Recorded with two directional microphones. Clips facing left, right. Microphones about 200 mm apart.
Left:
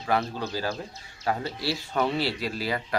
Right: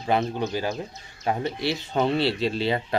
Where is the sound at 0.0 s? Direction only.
20° right (ahead or behind).